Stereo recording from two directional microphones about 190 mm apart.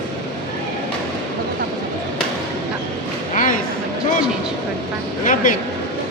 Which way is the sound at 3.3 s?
45° left (ahead or behind).